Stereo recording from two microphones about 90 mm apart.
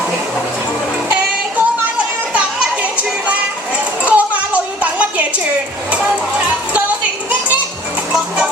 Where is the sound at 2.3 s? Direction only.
15° right (ahead or behind).